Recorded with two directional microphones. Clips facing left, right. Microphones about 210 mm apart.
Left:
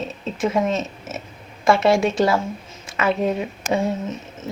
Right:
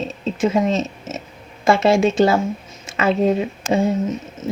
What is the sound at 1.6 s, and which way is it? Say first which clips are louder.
Speech: right 2 dB; 25° right (ahead or behind).